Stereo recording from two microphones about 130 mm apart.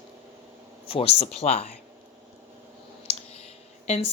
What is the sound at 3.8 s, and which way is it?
Speech, 60° left (ahead or behind).